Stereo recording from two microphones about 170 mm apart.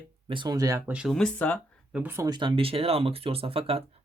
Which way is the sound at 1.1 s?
5° left (ahead or behind).